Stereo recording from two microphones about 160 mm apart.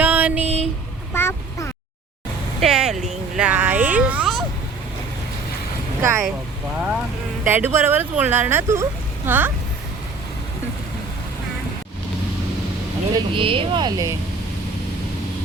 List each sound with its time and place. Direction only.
0.0 s a sound: 10° right (ahead or behind)
1.1 s quack: 15° left (ahead or behind)
2.6 s a sound: 5° right (ahead or behind)
6.0 s speech: 20° right (ahead or behind)
7.4 s speech: 10° right (ahead or behind)
13.1 s speech: 35° right (ahead or behind)